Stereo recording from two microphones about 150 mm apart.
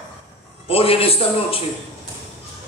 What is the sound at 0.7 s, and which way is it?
Speech, 40° left (ahead or behind).